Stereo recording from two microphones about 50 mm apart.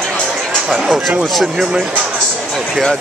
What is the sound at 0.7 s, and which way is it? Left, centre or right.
Speech, centre.